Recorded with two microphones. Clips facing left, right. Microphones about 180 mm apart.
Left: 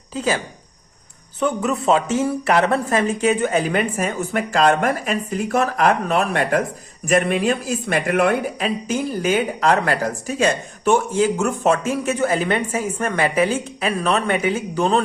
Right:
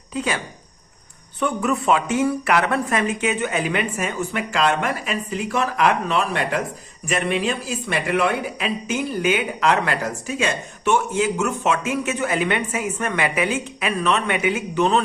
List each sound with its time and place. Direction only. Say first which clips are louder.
0.1 s speech: left 3 dB; 30° left (ahead or behind)